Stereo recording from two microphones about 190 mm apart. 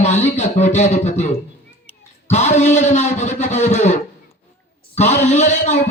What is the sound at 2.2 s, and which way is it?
A man's voice, 35° left (ahead or behind).